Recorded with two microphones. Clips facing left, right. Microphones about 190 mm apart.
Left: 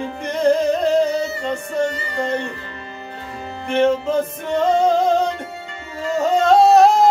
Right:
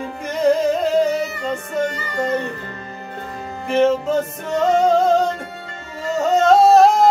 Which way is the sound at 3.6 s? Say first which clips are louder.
Right 1 dB; centre (ahead or behind).